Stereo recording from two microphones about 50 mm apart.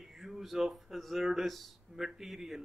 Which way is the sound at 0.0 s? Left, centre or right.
Centre.